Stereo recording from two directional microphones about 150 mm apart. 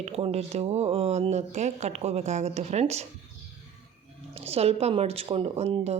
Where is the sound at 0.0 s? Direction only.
45° right (ahead or behind).